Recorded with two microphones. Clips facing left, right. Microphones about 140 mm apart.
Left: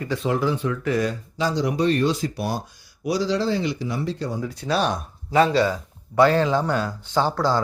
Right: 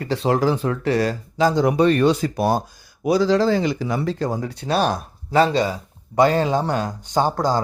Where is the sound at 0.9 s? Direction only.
90° right.